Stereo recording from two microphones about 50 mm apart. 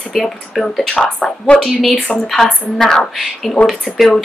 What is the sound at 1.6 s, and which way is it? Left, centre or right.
A woman's voice, centre.